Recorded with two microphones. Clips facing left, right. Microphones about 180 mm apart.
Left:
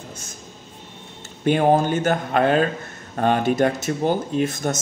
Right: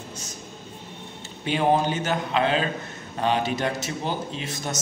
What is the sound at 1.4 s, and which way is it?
Speech, 50° left (ahead or behind).